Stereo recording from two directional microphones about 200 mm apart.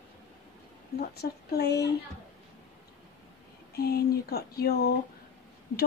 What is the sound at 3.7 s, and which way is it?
Speech, 50° left (ahead or behind).